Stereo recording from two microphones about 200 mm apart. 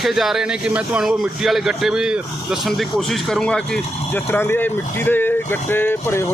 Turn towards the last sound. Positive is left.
turn(degrees=10)  # may be behind; listen again after turning